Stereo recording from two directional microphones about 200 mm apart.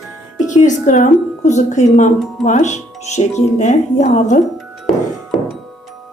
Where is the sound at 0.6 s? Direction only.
40° left (ahead or behind).